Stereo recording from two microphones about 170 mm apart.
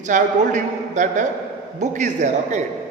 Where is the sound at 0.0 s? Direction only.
45° right (ahead or behind).